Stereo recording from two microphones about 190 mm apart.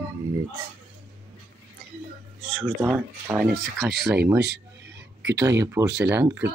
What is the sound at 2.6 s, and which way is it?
Speech, 10° right (ahead or behind).